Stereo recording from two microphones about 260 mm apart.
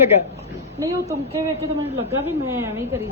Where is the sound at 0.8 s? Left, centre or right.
Centre.